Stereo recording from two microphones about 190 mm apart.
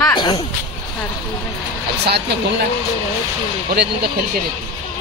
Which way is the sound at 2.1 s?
60° right (ahead or behind).